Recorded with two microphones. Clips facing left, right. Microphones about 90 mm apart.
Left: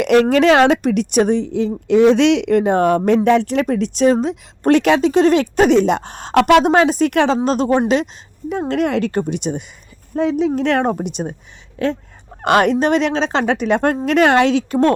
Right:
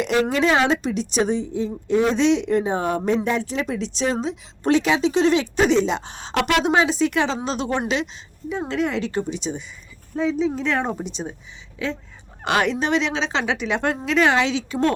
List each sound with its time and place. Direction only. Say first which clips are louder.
0.0 s a woman's voice: left 7 dB; 65° left (ahead or behind)